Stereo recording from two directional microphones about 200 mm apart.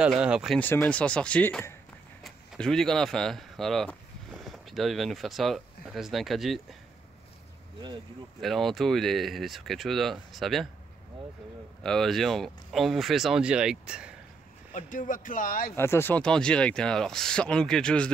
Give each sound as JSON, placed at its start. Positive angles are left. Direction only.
{"t": 0.0, "sound": "speech", "side_deg": -5}
{"t": 0.6, "sound": "speech", "side_deg": 10}
{"t": 8.4, "sound": "speech", "side_deg": 0}
{"t": 11.8, "sound": "speech", "side_deg": 5}
{"t": 14.7, "sound": "speech", "side_deg": 40}
{"t": 15.7, "sound": "speech", "side_deg": 10}